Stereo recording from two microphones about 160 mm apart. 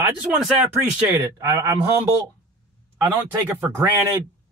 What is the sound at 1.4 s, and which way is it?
Speech, 20° right (ahead or behind).